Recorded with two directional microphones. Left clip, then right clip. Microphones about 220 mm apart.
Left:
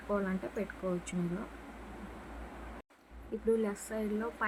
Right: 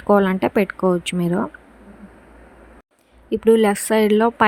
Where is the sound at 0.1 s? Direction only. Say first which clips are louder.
Right 19 dB; 45° right (ahead or behind).